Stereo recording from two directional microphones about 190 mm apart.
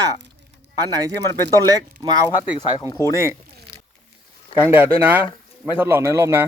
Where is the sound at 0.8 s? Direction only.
20° right (ahead or behind).